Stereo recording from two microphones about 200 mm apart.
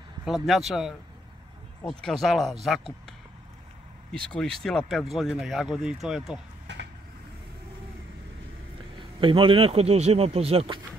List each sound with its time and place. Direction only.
0.2 s speech: centre (ahead or behind)
4.1 s speech: 5° left (ahead or behind)
6.7 s vehicle: 60° right (ahead or behind)
9.2 s speech: 25° right (ahead or behind)